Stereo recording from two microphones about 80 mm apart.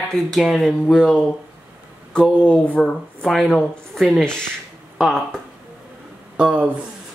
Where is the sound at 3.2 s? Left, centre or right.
Centre.